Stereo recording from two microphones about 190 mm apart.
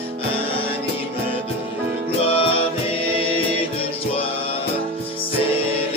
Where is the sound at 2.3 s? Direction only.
30° left (ahead or behind).